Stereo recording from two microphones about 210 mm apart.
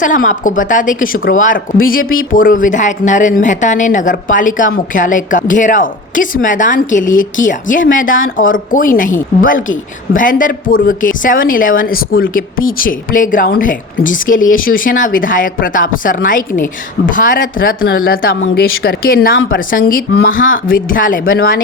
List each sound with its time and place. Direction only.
0.0 s a woman's voice: 40° left (ahead or behind)